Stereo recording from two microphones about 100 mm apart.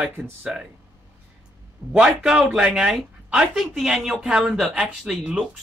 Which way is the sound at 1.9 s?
5° right (ahead or behind).